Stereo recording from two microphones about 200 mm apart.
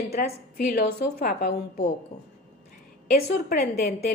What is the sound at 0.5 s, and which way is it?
A woman's voice, 50° left (ahead or behind).